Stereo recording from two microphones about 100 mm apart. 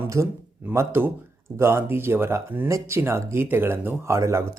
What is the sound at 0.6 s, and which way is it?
Speech, 25° right (ahead or behind).